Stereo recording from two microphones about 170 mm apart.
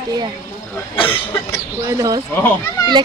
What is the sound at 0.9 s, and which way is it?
Cough, 30° left (ahead or behind).